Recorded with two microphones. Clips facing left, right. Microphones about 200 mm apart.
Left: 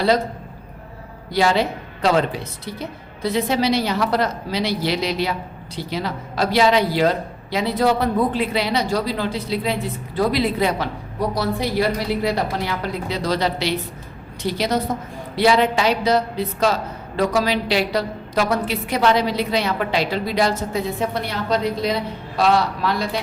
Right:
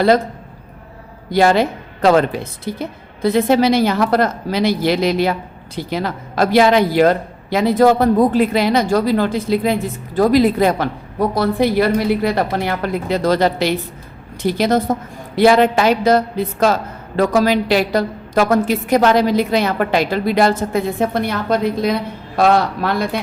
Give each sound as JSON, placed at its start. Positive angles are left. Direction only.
{"t": 1.3, "sound": "a woman's voice", "side_deg": -50}